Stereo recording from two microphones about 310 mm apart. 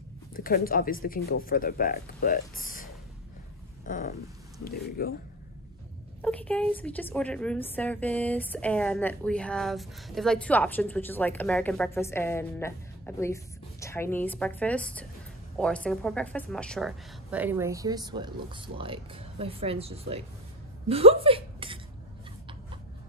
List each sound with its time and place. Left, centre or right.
0.3 s speech: left
6.2 s a woman's voice: centre
20.9 s a sound: centre